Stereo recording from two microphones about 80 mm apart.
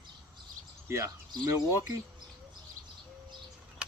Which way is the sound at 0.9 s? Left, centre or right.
Right.